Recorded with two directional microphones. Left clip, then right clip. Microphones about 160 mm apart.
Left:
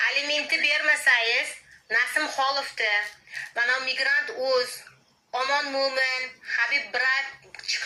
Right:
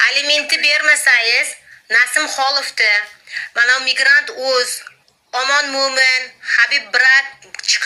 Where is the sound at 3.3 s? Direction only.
25° right (ahead or behind).